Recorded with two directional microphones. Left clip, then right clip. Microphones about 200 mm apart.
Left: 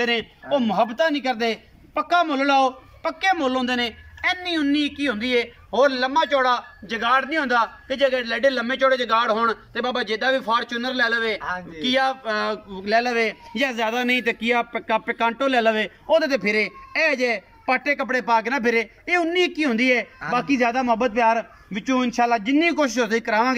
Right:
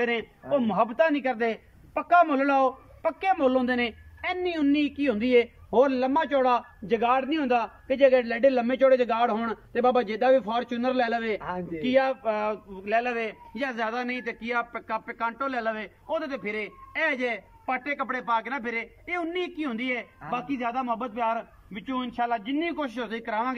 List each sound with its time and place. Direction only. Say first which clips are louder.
0.0 s a man's voice: left 5 dB; 5° right (ahead or behind)
12.8 s a man's voice: left 6 dB; centre (ahead or behind)